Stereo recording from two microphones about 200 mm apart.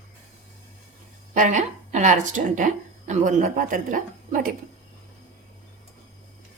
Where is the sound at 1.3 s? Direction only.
40° right (ahead or behind).